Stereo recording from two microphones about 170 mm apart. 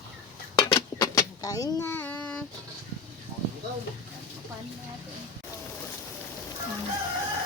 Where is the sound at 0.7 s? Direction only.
25° left (ahead or behind); by 2.4 s 10° left (ahead or behind).